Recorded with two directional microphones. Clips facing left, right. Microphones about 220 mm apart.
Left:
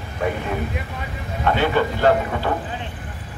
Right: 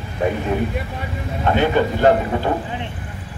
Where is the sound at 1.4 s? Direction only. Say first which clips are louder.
Right 2 dB; 15° right (ahead or behind).